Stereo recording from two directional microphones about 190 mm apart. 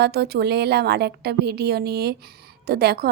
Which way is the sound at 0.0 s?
55° right (ahead or behind).